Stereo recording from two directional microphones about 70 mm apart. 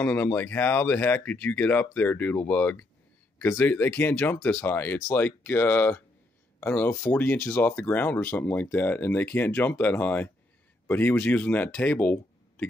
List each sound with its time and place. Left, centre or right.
0.0 s speech: left
4.6 s speech: left